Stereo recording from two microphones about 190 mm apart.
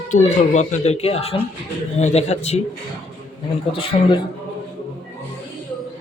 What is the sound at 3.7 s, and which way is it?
Speech, 30° left (ahead or behind).